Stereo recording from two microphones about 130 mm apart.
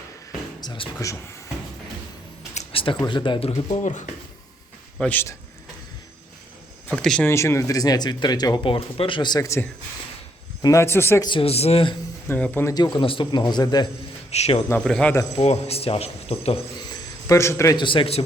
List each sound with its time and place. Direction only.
0.6 s speech: 35° left (ahead or behind)
2.7 s speech: 40° left (ahead or behind)
4.9 s speech: 10° left (ahead or behind)
7.0 s speech: 5° left (ahead or behind)
7.3 s speech: 20° left (ahead or behind)
11.2 s a man's voice: 40° left (ahead or behind)
12.3 s speech: 15° left (ahead or behind)
12.7 s speech: 35° left (ahead or behind)
14.3 s a man's voice: 55° left (ahead or behind)
14.8 s speech: 5° left (ahead or behind)
15.1 s speech: 25° left (ahead or behind)
15.4 s a man's voice: 50° left (ahead or behind)
16.9 s a sound: 25° left (ahead or behind)
17.7 s speech: 40° left (ahead or behind)